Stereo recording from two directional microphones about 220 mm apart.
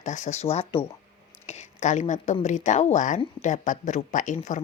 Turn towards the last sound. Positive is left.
turn(degrees=35)  # may be behind; listen again after turning